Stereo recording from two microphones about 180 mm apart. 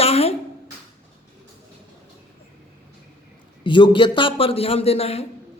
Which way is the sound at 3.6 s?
25° left (ahead or behind).